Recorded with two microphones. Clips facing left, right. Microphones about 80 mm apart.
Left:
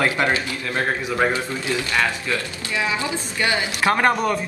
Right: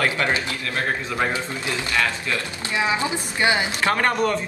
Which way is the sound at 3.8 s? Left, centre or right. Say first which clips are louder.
Left 7 dB; centre.